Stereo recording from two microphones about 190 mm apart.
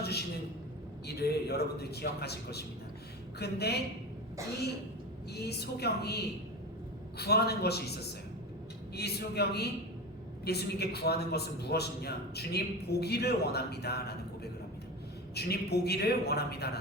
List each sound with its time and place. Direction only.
1.0 s a man's voice: 60° left (ahead or behind)
5.3 s a man's voice: 60° left (ahead or behind)
9.0 s a man's voice: 60° left (ahead or behind)